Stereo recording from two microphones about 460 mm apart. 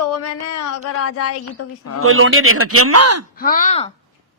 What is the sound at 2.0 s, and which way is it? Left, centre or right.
A man's voice, right.